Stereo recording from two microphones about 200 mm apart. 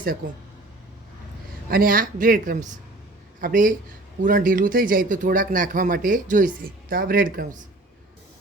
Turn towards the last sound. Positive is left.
turn(degrees=-40)  # may be behind; listen again after turning